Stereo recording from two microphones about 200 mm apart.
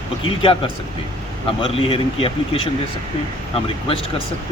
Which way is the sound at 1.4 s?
25° left (ahead or behind).